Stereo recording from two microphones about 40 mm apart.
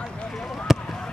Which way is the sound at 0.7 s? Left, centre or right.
Centre.